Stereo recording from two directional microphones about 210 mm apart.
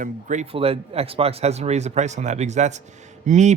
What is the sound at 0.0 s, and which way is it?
Speech, 35° right (ahead or behind).